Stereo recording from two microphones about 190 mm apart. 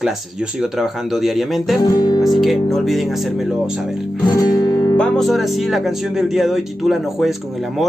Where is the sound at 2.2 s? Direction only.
Centre (ahead or behind).